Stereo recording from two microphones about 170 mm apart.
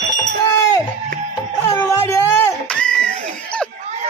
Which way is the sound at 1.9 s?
20° left (ahead or behind).